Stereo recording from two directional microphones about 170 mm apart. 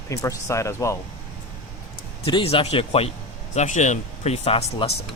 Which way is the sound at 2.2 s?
30° left (ahead or behind).